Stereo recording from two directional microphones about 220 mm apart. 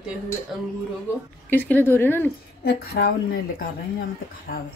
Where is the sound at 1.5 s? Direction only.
10° left (ahead or behind).